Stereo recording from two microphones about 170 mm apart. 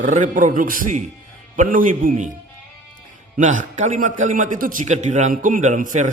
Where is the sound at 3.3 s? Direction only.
50° right (ahead or behind).